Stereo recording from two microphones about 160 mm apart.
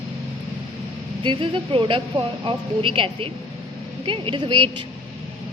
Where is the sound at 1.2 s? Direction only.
30° right (ahead or behind).